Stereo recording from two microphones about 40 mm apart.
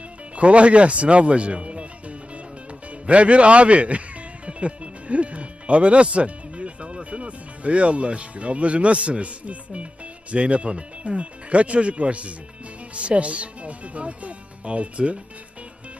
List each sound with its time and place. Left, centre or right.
0.3 s speech: right